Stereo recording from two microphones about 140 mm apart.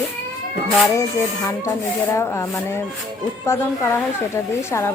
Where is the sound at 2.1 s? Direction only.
20° left (ahead or behind).